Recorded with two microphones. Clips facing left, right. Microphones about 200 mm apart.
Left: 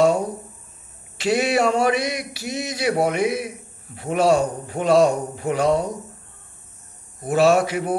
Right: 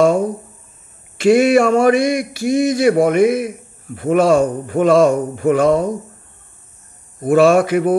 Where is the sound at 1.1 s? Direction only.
50° right (ahead or behind).